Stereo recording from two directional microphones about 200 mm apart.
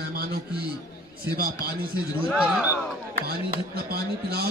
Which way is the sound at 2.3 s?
5° right (ahead or behind).